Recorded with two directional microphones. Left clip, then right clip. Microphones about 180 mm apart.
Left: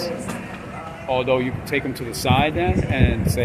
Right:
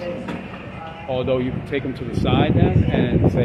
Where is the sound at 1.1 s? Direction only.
10° right (ahead or behind).